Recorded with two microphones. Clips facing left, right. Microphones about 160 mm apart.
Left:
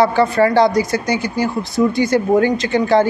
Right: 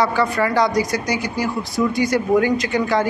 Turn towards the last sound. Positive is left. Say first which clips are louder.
# left 5 dB
turn(degrees=30)  # may be behind; listen again after turning